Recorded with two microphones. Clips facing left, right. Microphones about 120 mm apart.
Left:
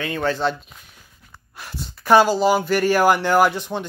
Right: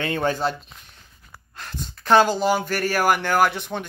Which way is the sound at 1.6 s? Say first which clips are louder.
Left 1 dB; 10° left (ahead or behind).